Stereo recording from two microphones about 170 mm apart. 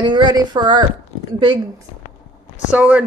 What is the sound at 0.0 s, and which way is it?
Speech, 25° right (ahead or behind).